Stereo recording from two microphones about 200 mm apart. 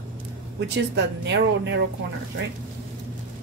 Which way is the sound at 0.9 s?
60° right (ahead or behind).